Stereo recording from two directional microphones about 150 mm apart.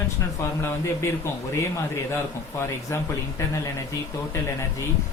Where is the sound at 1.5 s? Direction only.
15° left (ahead or behind).